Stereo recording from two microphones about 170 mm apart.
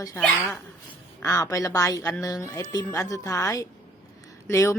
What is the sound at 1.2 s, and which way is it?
A woman's voice, 20° left (ahead or behind).